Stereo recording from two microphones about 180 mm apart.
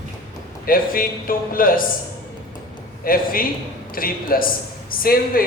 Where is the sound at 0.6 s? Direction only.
50° left (ahead or behind).